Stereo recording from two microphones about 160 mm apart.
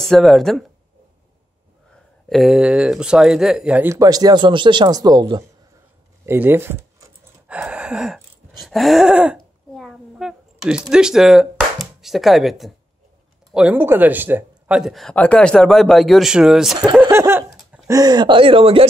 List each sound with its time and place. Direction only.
0.1 s speech: centre (ahead or behind)
2.2 s speech: centre (ahead or behind)
3.9 s speech: 20° right (ahead or behind)
6.2 s speech: 15° right (ahead or behind)
7.4 s gasp: 5° right (ahead or behind)
13.5 s speech: 5° right (ahead or behind)
17.1 s a sound: 15° right (ahead or behind)
17.8 s speech: 25° right (ahead or behind)